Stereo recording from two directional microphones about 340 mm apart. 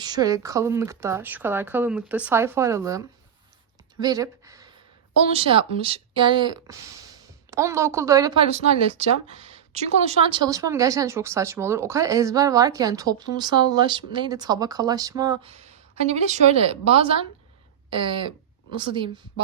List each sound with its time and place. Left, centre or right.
0.0 s a woman's voice: centre
4.0 s a sound: centre
5.3 s a woman's voice: centre